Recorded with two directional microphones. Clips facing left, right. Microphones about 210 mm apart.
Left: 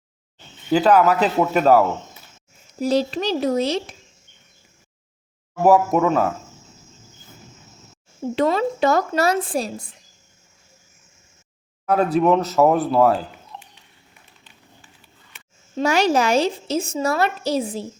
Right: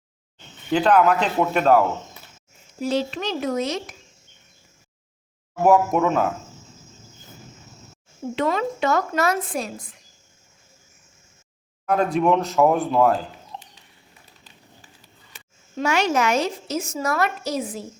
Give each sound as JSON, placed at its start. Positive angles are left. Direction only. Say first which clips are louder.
{"t": 0.7, "sound": "speech", "louder": "left 2 dB", "side_deg": 5}
{"t": 2.8, "sound": "a woman's voice", "louder": "left 4 dB", "side_deg": 40}
{"t": 5.6, "sound": "speech", "louder": "left 2 dB", "side_deg": 0}
{"t": 8.4, "sound": "a woman's voice", "louder": "left 4 dB", "side_deg": 35}
{"t": 11.9, "sound": "speech", "louder": "left 2 dB", "side_deg": 5}
{"t": 13.5, "sound": "a sound", "louder": "right 2 dB", "side_deg": -20}
{"t": 15.8, "sound": "a woman's voice", "louder": "left 3 dB", "side_deg": 35}